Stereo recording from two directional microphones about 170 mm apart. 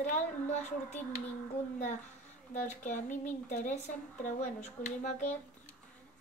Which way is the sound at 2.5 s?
45° left (ahead or behind).